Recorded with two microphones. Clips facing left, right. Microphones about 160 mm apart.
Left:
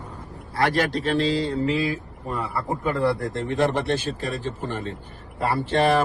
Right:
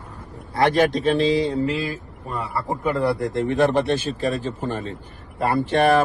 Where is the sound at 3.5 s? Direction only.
20° right (ahead or behind).